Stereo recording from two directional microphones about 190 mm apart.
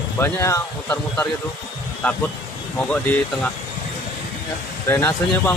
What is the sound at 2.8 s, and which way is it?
Speech, 5° left (ahead or behind).